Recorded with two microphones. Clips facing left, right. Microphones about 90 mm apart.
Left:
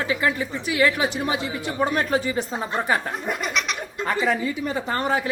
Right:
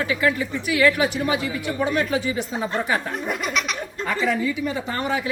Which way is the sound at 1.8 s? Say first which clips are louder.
Left 1 dB; 40° left (ahead or behind).